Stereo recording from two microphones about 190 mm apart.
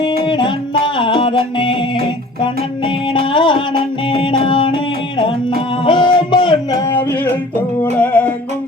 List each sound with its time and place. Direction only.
0.3 s music: 25° left (ahead or behind)
5.8 s a sound: 25° left (ahead or behind)
7.9 s music: 10° left (ahead or behind)